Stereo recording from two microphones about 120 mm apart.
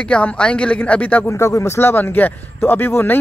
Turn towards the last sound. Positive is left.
turn(degrees=15)  # may be behind; listen again after turning